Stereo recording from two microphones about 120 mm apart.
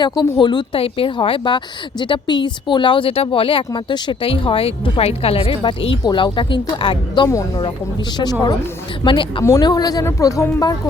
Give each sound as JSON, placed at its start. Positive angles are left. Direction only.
{"t": 0.0, "sound": "speech", "side_deg": 40}
{"t": 3.7, "sound": "speech", "side_deg": 40}